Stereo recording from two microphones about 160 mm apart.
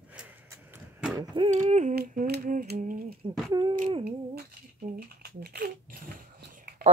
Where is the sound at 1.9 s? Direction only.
75° right (ahead or behind).